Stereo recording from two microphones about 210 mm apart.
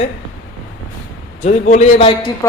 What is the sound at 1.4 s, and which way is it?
Speech, 35° left (ahead or behind).